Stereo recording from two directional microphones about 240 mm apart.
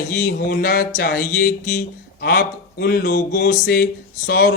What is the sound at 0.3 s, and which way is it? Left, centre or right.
A man's voice, left.